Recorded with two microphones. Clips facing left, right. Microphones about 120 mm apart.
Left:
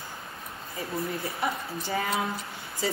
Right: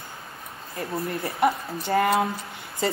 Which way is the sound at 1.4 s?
60° right (ahead or behind).